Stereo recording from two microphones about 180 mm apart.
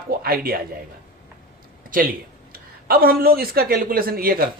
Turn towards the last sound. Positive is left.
turn(degrees=-55)  # may be behind; listen again after turning